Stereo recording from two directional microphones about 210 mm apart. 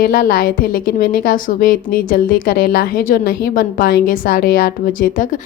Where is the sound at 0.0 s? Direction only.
45° left (ahead or behind).